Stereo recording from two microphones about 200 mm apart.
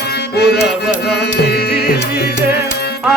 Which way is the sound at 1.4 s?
50° left (ahead or behind).